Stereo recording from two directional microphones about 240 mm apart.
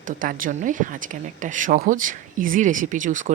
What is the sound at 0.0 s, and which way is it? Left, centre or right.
Speech, right.